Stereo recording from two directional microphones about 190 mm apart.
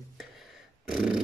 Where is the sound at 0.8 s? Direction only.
5° right (ahead or behind).